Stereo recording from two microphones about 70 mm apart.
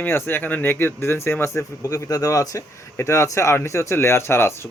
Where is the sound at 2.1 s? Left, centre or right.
Left.